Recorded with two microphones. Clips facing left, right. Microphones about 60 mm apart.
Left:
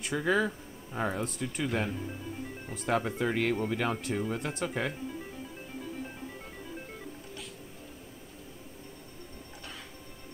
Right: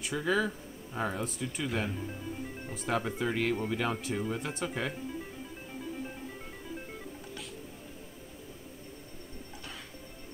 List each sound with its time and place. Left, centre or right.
0.2 s speech: centre